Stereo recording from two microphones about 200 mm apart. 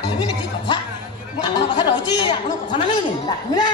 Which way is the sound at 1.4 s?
25° left (ahead or behind).